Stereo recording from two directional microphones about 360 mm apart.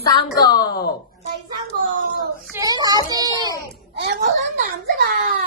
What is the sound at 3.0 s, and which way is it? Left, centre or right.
Child singing, centre.